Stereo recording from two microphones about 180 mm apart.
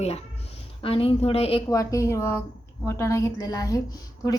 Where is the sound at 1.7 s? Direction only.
20° left (ahead or behind).